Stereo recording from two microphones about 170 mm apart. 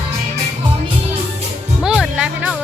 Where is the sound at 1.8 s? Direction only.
5° right (ahead or behind).